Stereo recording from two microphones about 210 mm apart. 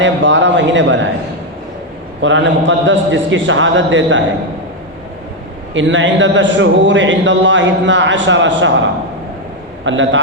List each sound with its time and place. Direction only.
0.0 s a man's voice: 60° right (ahead or behind)
2.2 s a man's voice: 60° right (ahead or behind)
5.7 s a man's voice: 60° right (ahead or behind)
9.8 s a man's voice: 65° right (ahead or behind)